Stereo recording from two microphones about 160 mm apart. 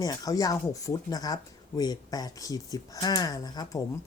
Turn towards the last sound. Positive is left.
turn(degrees=25)  # may be behind; listen again after turning